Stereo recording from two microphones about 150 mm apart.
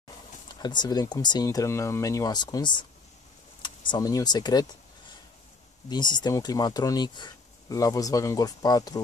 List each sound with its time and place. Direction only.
0.5 s speech: 30° left (ahead or behind)
5.9 s speech: 30° left (ahead or behind)